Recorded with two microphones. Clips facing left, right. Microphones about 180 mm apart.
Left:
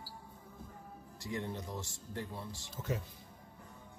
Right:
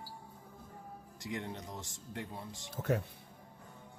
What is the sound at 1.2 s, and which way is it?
Speech, 20° right (ahead or behind).